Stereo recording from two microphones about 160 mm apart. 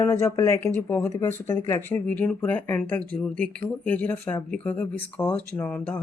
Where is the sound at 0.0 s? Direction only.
15° left (ahead or behind).